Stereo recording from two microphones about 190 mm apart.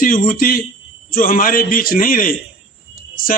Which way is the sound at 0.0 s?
50° left (ahead or behind).